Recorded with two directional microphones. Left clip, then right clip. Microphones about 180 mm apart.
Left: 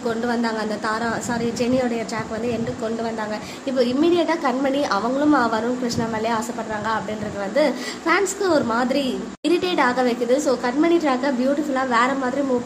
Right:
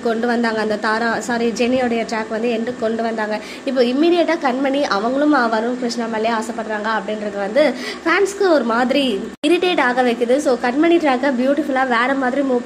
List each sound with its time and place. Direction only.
0.0 s a woman's voice: 15° right (ahead or behind)
7.5 s a woman's voice: 15° right (ahead or behind)